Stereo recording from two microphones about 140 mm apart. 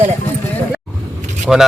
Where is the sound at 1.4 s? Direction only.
5° right (ahead or behind).